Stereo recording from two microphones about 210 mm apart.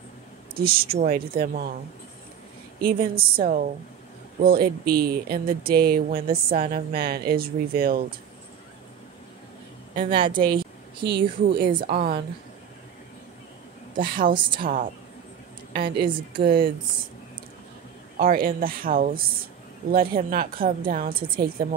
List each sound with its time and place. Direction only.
0.6 s speech: 45° right (ahead or behind)
2.8 s speech: 45° right (ahead or behind)
10.0 s speech: 25° right (ahead or behind)
10.4 s a sound: 25° right (ahead or behind)
11.1 s a woman's voice: 55° right (ahead or behind)
11.7 s speech: 40° right (ahead or behind)
14.3 s speech: 25° right (ahead or behind)
15.7 s speech: 50° right (ahead or behind)
16.1 s speech: 25° right (ahead or behind)
18.1 s speech: 45° right (ahead or behind)